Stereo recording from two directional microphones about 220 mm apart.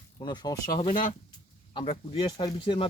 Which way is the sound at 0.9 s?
35° left (ahead or behind).